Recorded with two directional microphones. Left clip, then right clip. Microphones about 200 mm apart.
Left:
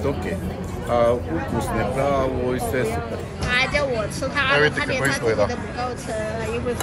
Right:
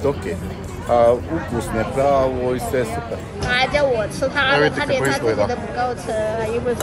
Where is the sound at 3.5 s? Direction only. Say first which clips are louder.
Right 4 dB; 50° right (ahead or behind).